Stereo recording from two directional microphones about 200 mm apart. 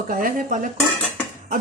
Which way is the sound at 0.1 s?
45° right (ahead or behind).